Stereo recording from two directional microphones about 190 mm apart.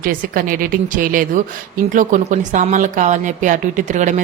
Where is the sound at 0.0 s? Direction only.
50° right (ahead or behind).